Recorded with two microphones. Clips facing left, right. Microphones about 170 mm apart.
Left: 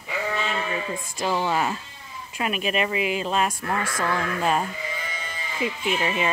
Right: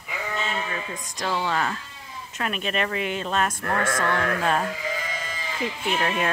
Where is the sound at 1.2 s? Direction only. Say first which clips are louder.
Left 2 dB; 15° left (ahead or behind).